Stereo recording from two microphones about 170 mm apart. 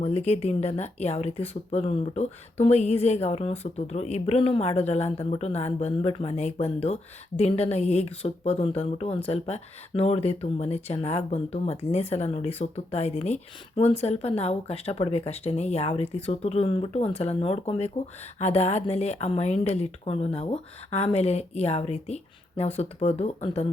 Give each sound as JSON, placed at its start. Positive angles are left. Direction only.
{"t": 0.0, "sound": "a woman's voice", "side_deg": 40}